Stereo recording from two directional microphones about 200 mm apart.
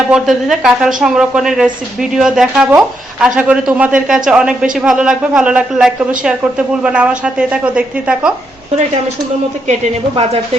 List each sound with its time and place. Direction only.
0.1 s a woman's voice: centre (ahead or behind)